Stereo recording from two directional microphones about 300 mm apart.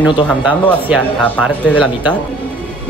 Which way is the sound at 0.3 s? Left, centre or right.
Centre.